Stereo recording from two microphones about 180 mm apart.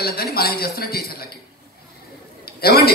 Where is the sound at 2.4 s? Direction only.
60° left (ahead or behind).